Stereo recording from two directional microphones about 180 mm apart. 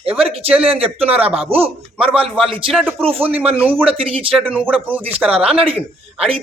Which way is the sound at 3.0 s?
30° right (ahead or behind).